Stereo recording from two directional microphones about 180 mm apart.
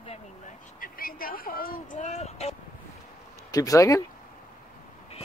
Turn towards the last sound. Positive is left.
turn(degrees=20)  # may be behind; listen again after turning